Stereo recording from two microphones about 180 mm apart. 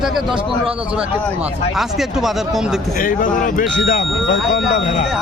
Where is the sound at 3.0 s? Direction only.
50° left (ahead or behind).